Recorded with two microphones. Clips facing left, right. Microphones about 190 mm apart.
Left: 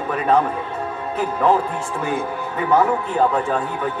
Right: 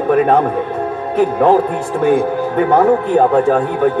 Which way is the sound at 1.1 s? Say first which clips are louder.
Right 7 dB; 55° right (ahead or behind).